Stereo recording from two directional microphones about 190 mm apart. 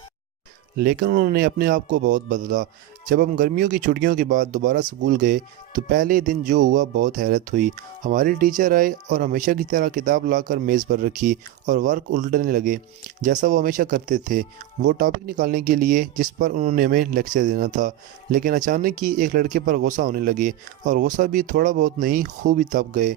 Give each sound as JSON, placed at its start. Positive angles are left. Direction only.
{"t": 0.8, "sound": "speech", "side_deg": -55}